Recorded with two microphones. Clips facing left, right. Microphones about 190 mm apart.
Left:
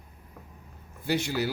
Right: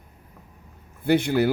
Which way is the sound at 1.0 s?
55° right (ahead or behind).